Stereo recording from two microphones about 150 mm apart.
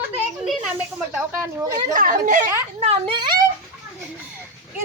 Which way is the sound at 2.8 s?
40° right (ahead or behind).